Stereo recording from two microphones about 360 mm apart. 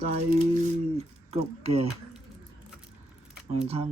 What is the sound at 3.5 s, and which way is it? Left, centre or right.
Speech, centre.